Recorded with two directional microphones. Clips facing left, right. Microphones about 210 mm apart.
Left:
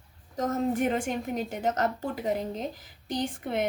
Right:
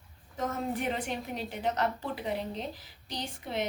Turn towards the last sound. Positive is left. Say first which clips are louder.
# left 6 dB
turn(degrees=50)  # may be behind; listen again after turning